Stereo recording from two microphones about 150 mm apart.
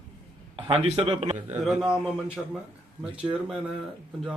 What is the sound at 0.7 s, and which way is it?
Speech, 40° right (ahead or behind).